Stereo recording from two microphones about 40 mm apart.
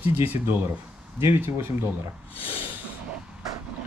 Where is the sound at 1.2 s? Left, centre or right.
Right.